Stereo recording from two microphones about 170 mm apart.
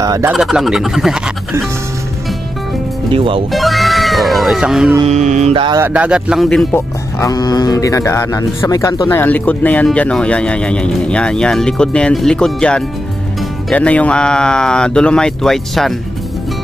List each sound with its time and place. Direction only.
0.0 s speech: 20° right (ahead or behind)
0.3 s speech: centre (ahead or behind)
3.1 s speech: 30° right (ahead or behind)
3.5 s music: centre (ahead or behind)
5.0 s mantra: 45° right (ahead or behind)
5.5 s speech: 30° right (ahead or behind)
5.8 s speech: 5° right (ahead or behind)
6.7 s speech: 20° left (ahead or behind); by 15.9 s centre (ahead or behind)